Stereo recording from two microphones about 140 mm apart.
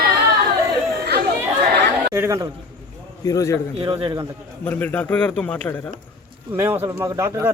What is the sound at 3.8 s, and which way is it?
Speech, 35° right (ahead or behind).